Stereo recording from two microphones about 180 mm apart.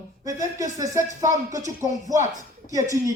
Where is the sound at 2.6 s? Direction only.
20° right (ahead or behind).